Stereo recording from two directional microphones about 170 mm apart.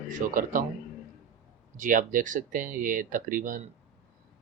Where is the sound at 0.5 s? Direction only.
50° right (ahead or behind).